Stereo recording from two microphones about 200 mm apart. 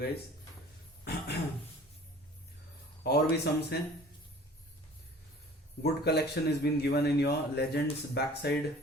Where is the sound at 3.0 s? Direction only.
55° left (ahead or behind).